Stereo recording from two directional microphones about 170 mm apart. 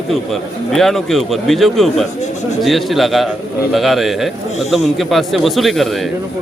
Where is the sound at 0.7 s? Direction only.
Centre (ahead or behind).